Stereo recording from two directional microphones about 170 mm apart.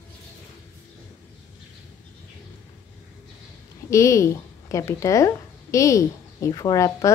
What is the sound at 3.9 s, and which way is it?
A woman's voice, 15° left (ahead or behind).